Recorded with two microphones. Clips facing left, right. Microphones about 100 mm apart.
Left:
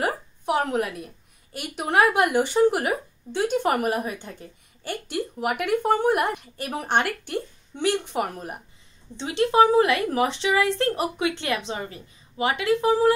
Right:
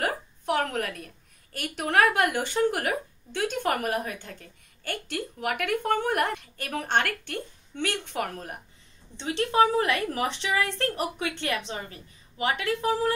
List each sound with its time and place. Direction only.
0.0 s a woman's voice: 20° left (ahead or behind)